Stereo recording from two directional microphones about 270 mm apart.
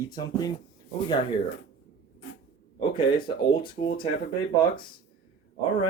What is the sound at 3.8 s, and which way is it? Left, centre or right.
Speech, left.